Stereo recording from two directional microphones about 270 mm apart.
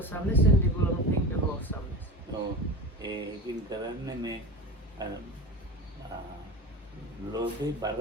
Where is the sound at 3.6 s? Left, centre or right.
Centre.